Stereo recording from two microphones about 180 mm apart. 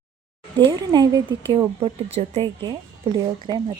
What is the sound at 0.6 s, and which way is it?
Speech, 25° right (ahead or behind).